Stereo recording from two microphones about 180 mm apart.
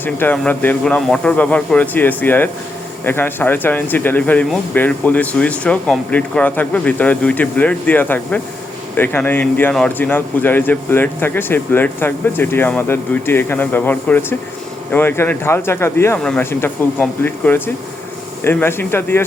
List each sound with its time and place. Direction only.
0.0 s a man's voice: 10° left (ahead or behind)